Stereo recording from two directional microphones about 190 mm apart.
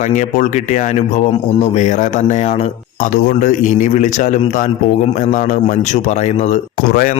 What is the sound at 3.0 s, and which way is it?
A man's voice, 45° left (ahead or behind).